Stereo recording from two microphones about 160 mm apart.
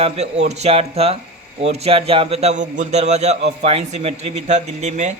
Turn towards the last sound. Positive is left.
turn(degrees=-45)  # may be behind; listen again after turning